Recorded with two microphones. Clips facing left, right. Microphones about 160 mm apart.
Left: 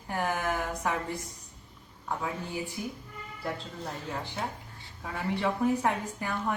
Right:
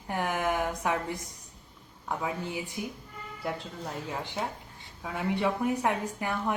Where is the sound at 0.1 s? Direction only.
15° right (ahead or behind).